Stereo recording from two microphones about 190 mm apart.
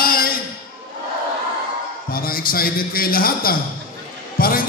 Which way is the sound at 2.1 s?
50° left (ahead or behind).